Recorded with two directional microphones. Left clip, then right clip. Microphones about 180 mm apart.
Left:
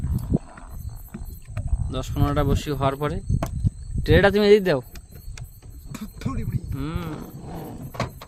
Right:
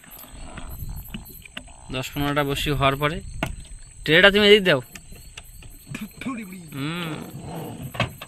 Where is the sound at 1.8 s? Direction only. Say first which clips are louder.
Right 1 dB; 20° left (ahead or behind).